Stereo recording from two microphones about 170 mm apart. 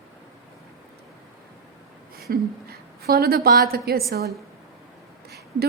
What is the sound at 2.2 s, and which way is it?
A woman's voice, 65° right (ahead or behind).